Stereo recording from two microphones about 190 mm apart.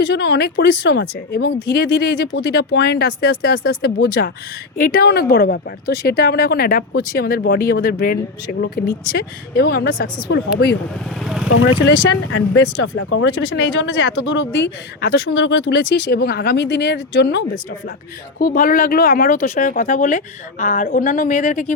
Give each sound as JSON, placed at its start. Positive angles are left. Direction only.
{"t": 0.0, "sound": "speech", "side_deg": 65}
{"t": 11.2, "sound": "speech", "side_deg": 0}
{"t": 12.1, "sound": "speech", "side_deg": 90}
{"t": 18.3, "sound": "speech", "side_deg": 50}